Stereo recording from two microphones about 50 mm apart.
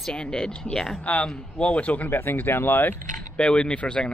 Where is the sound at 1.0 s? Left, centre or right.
Left.